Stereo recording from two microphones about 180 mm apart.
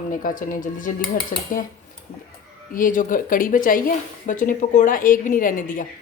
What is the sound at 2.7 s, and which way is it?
Speech, 50° left (ahead or behind).